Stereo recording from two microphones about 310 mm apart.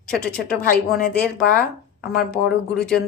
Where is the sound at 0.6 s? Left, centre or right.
Left.